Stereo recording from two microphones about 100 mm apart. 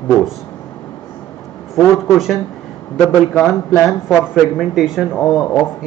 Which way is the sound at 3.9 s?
5° right (ahead or behind).